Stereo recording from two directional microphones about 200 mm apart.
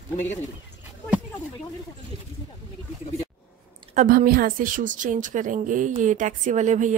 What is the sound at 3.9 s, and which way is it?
A woman's voice, 45° right (ahead or behind).